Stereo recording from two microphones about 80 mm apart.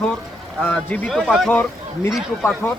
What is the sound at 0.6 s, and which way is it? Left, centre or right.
Speech, centre.